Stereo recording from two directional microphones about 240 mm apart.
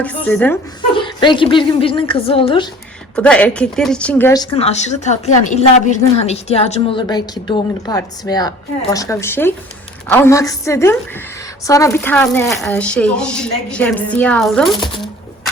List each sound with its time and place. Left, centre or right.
0.0 s a woman's voice: centre
0.9 s a woman's voice: centre
3.2 s speech: centre
4.5 s a woman's voice: left; by 14.7 s centre